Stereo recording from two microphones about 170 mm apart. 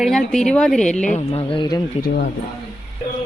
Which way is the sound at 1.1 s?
40° left (ahead or behind).